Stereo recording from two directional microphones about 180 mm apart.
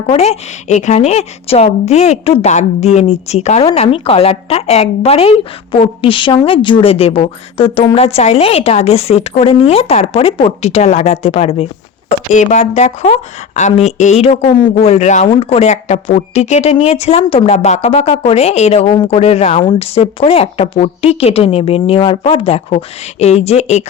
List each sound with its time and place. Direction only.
0.1 s a woman's voice: 35° left (ahead or behind)